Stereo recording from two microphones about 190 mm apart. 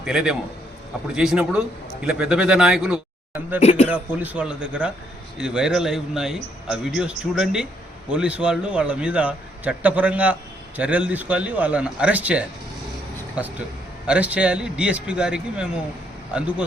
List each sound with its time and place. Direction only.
0.0 s a man's voice: 5° right (ahead or behind)
3.6 s speech: 35° left (ahead or behind)
3.8 s a man's voice: 5° right (ahead or behind)